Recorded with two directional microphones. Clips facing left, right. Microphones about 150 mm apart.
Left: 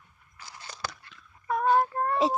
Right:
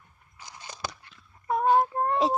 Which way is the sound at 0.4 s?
15° right (ahead or behind).